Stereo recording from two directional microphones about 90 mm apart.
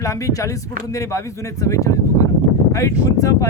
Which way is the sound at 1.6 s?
35° left (ahead or behind).